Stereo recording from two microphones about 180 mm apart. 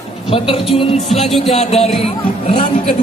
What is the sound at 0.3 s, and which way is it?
Speech, 30° left (ahead or behind).